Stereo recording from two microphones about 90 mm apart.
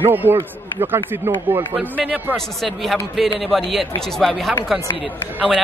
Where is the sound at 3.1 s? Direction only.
Centre (ahead or behind).